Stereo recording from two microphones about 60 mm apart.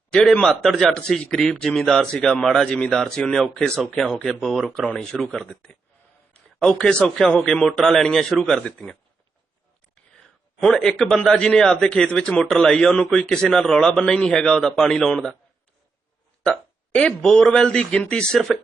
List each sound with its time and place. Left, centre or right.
0.4 s speech: centre
7.4 s speech: centre
10.6 s speech: centre
12.4 s speech: centre
16.4 s speech: centre